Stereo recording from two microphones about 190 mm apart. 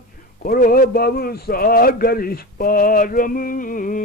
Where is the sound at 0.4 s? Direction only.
50° left (ahead or behind).